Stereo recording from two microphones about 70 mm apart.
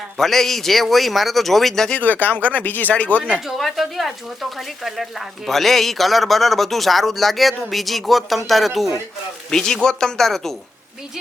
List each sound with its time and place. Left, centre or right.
0.2 s speech: centre
2.0 s speech: left
3.4 s speech: centre